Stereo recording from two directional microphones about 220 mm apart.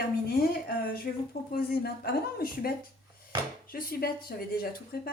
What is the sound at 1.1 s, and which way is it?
Speech, 50° left (ahead or behind).